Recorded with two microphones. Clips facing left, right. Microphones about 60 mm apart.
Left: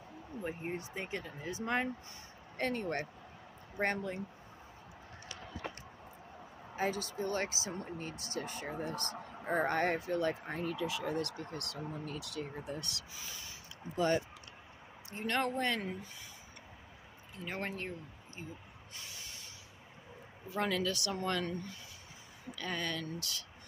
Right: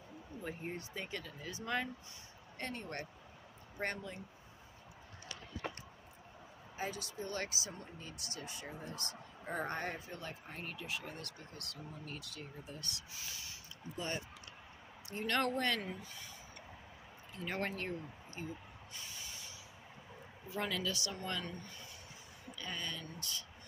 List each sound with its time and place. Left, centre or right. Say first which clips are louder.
0.4 s speech: left 4 dB; left
2.5 s speech: left 8 dB; left
3.7 s speech: left 6 dB; left
6.8 s speech: left 7 dB; left
9.7 s speech: left 9 dB; left
12.5 s speech: left 8 dB; left
13.9 s speech: left 10 dB; left
15.0 s speech: left 1 dB; left
17.5 s speech: even; centre
18.9 s a sound: left 1 dB; left
20.4 s speech: left 4 dB; left
22.6 s speech: left 6 dB; left